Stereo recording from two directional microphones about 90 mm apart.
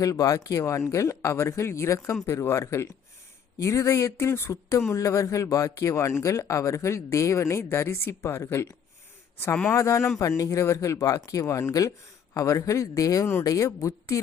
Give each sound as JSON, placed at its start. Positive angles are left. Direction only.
{"t": 0.0, "sound": "speech", "side_deg": 40}
{"t": 9.7, "sound": "speech", "side_deg": 35}